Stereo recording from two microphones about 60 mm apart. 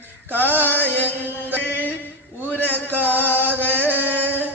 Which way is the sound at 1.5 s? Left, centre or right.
Left.